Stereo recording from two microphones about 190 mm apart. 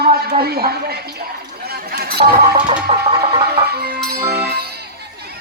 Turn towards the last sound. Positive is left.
turn(degrees=-55)  # may be behind; listen again after turning